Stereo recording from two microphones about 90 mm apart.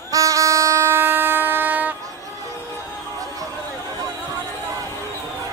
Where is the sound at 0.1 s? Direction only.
40° right (ahead or behind); by 1.9 s 20° right (ahead or behind).